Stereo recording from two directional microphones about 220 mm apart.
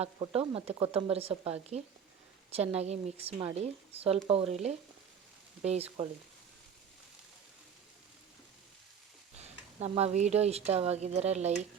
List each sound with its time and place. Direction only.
0.0 s speech: 25° right (ahead or behind)
5.6 s speech: 30° right (ahead or behind)
9.4 s speech: 30° right (ahead or behind)